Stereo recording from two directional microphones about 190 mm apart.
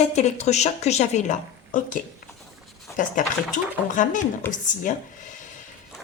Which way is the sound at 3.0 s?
40° left (ahead or behind).